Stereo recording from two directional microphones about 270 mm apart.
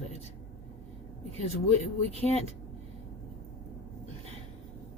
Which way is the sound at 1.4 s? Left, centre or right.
Left.